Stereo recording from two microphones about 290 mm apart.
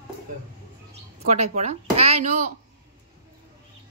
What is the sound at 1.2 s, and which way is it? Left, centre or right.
Speech, right.